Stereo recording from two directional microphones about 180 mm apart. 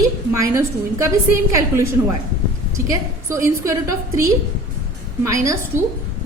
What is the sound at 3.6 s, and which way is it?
A woman's voice, 15° right (ahead or behind).